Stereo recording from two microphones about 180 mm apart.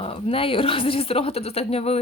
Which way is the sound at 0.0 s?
30° left (ahead or behind).